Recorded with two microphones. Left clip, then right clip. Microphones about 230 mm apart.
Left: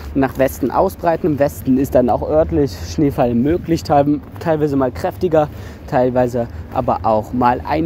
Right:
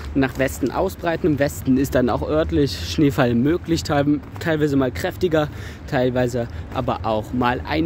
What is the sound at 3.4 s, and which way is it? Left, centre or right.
Speech, centre.